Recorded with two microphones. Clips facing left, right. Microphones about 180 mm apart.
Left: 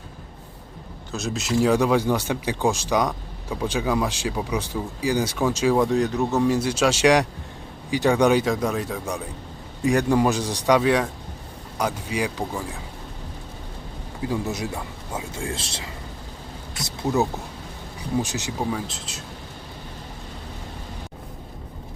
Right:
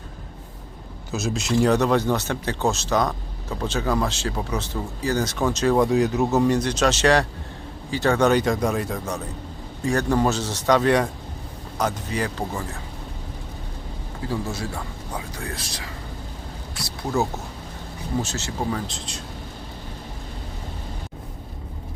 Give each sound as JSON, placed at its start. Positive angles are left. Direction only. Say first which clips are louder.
{"t": 1.1, "sound": "speech", "louder": "right 1 dB", "side_deg": 0}
{"t": 9.8, "sound": "speech", "louder": "left 2 dB", "side_deg": 15}
{"t": 14.4, "sound": "speech", "louder": "left 2 dB", "side_deg": 20}
{"t": 16.7, "sound": "a sound", "louder": "left 4 dB", "side_deg": 20}
{"t": 18.2, "sound": "speech", "louder": "left 1 dB", "side_deg": 15}